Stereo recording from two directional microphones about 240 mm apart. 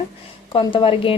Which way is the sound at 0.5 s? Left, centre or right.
Left.